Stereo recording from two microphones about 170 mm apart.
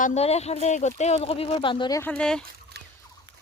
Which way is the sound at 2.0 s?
10° left (ahead or behind).